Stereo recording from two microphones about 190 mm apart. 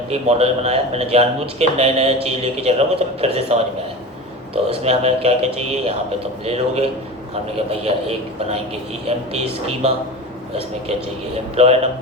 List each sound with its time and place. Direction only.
0.1 s a man's voice: 35° right (ahead or behind)
11.5 s a man's voice: 35° right (ahead or behind)